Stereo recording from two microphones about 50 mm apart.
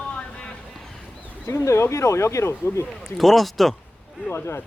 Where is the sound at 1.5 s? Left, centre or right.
Left.